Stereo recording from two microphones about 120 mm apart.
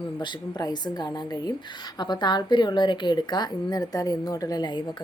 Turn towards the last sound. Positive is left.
turn(degrees=35)  # may be behind; listen again after turning